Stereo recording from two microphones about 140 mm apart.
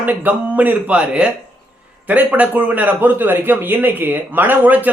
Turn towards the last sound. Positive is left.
turn(degrees=-10)  # may be behind; listen again after turning